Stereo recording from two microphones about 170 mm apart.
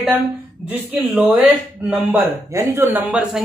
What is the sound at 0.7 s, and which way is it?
Speech, 10° right (ahead or behind).